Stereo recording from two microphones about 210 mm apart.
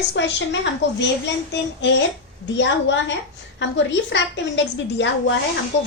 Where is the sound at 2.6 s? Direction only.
60° left (ahead or behind).